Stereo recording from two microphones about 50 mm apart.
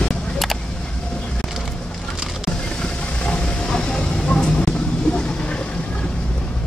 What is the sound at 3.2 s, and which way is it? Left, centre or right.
Train, centre.